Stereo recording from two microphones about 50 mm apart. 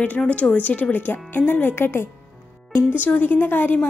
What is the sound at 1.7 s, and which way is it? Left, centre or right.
Speech, left.